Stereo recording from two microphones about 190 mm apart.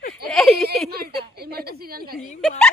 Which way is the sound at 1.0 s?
55° right (ahead or behind).